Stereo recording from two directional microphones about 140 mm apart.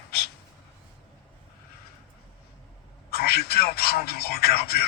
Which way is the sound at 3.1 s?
90° left.